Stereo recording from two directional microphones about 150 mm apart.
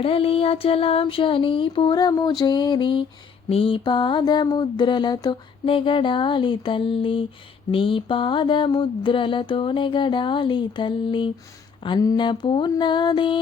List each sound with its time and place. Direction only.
0.0 s mantra: 40° left (ahead or behind)
2.4 s a sound: 30° left (ahead or behind)
3.5 s mantra: 35° left (ahead or behind)